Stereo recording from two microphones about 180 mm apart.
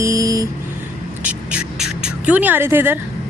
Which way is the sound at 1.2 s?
5° right (ahead or behind).